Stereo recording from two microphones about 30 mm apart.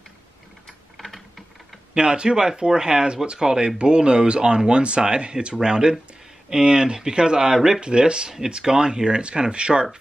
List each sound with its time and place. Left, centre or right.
0.9 s typing: centre
2.0 s a man's voice: right